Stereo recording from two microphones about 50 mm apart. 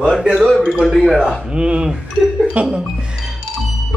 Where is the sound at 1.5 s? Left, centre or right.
Right.